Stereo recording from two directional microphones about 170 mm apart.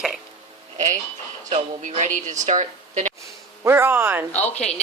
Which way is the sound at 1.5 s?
40° right (ahead or behind).